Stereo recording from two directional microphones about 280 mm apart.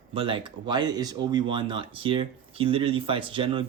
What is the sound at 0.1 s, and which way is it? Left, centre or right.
Speech, centre.